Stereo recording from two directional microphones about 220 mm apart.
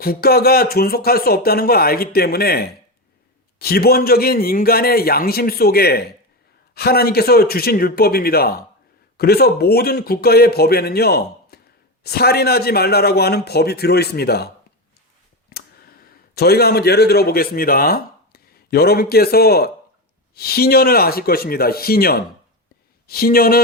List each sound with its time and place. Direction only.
0.0 s speech: 45° left (ahead or behind)
15.5 s a sound: 45° left (ahead or behind)
16.3 s speech: 45° left (ahead or behind)